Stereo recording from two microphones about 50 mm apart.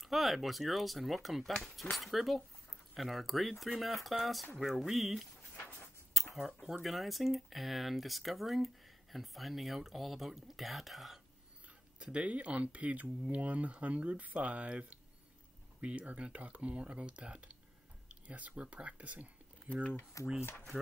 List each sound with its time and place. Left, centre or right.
0.0 s speech: centre
6.3 s speech: centre
12.0 s speech: right
18.0 s a sound: right
18.6 s speech: right
20.2 s speech: left